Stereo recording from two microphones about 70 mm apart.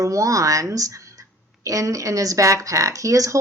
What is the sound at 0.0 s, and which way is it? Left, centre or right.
Speech, right.